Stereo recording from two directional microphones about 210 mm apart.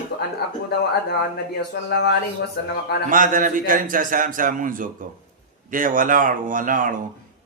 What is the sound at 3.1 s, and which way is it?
A man's voice, 40° right (ahead or behind).